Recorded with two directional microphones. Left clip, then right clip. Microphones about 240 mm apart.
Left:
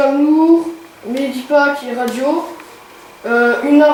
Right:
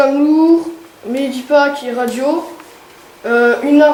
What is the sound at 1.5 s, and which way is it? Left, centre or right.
Speech, centre.